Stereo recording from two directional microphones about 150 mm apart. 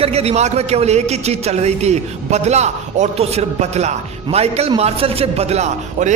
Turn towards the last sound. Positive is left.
turn(degrees=-50)  # may be behind; listen again after turning